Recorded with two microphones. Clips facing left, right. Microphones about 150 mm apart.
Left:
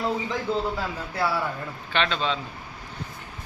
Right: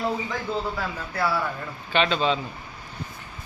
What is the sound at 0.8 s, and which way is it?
Speech, 15° left (ahead or behind).